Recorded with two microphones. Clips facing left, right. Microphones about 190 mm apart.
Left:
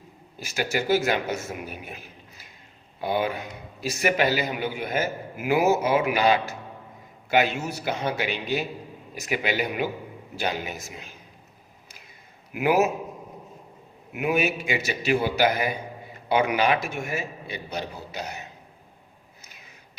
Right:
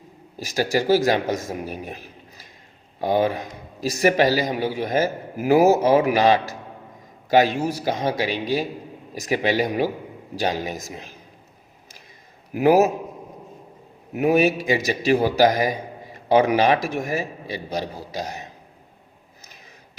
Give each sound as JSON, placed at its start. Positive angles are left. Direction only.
{"t": 0.3, "sound": "a man's voice", "side_deg": -35}
{"t": 12.5, "sound": "a man's voice", "side_deg": -35}
{"t": 14.1, "sound": "a man's voice", "side_deg": -40}